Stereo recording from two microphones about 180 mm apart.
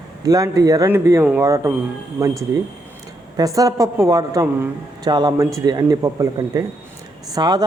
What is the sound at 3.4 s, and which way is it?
Speech, 20° right (ahead or behind).